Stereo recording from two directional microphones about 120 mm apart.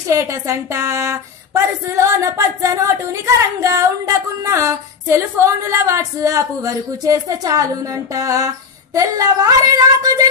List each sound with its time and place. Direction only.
0.1 s speech: 25° right (ahead or behind)